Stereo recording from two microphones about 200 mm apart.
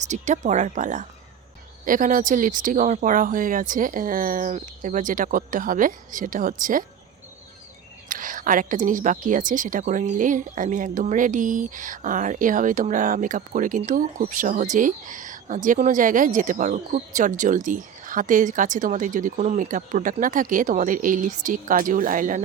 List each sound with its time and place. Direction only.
0.0 s a woman's voice: 35° right (ahead or behind)
8.1 s a woman's voice: 45° right (ahead or behind)